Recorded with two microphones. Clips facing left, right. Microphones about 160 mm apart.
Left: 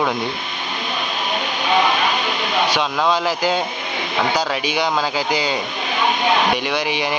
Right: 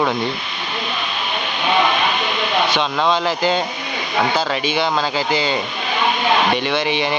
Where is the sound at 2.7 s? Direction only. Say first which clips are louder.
Right 1 dB; 10° left (ahead or behind).